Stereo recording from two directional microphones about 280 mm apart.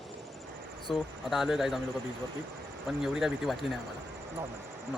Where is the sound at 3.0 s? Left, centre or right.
Centre.